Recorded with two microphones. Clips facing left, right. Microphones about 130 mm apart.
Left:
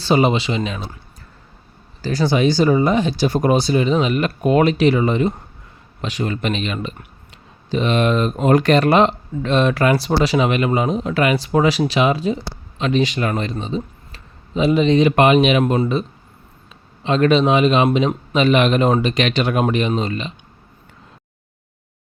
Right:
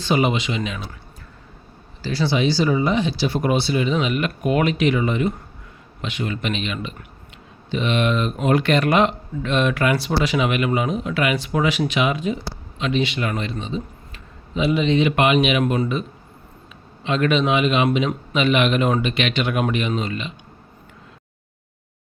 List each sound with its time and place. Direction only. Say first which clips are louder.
0.0 s speech: left 4 dB; 35° left (ahead or behind)
2.0 s speech: left 4 dB; 45° left (ahead or behind)